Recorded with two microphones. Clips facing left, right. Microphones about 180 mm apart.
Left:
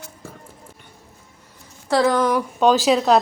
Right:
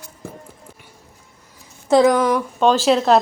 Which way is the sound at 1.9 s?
15° right (ahead or behind).